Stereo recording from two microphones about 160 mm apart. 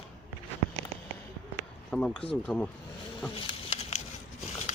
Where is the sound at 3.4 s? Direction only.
40° left (ahead or behind).